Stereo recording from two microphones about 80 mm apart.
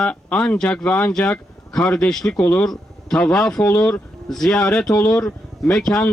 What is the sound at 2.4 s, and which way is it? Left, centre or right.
Speech, centre.